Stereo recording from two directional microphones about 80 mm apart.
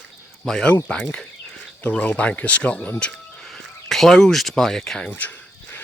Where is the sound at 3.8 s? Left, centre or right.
Centre.